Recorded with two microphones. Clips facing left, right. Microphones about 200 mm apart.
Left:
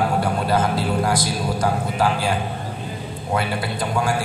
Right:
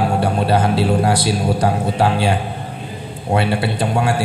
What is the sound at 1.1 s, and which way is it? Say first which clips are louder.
Speech: right 5 dB; 65° right (ahead or behind).